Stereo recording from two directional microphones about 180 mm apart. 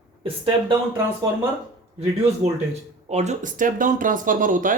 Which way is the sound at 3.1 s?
40° right (ahead or behind).